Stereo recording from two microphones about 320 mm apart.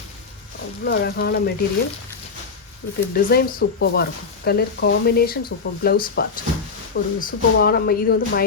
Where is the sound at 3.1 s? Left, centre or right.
Left.